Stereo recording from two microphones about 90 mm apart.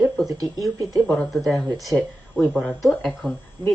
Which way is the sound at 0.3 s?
45° right (ahead or behind).